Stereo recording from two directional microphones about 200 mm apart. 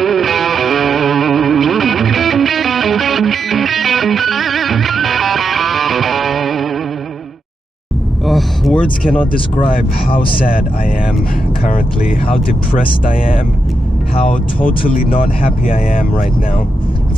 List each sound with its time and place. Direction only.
0.0 s music: centre (ahead or behind)
8.3 s a sound: centre (ahead or behind)
9.0 s speech: 5° left (ahead or behind)
13.1 s speech: 45° left (ahead or behind)
15.0 s speech: 45° left (ahead or behind)